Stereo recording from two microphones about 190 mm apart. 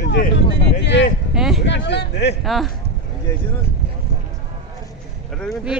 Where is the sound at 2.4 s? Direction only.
Centre (ahead or behind).